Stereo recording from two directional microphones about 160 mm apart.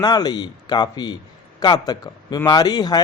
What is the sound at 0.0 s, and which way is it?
A man's voice, 25° left (ahead or behind).